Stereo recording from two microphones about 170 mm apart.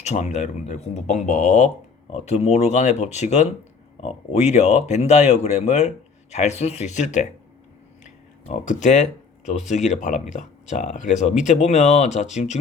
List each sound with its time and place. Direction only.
0.0 s speech: 40° left (ahead or behind)
8.0 s a sound: 45° left (ahead or behind)
9.5 s speech: 45° left (ahead or behind)